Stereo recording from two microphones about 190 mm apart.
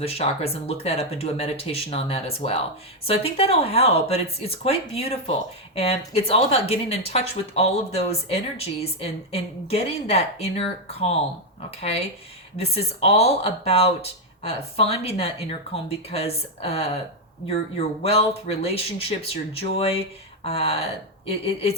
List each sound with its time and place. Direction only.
0.0 s speech: 30° left (ahead or behind)